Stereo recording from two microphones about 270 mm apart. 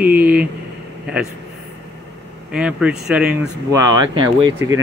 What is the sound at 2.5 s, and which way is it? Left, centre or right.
Speech, centre.